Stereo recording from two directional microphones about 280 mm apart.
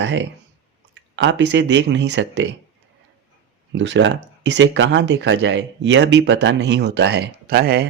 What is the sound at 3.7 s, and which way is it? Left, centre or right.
Speech, right.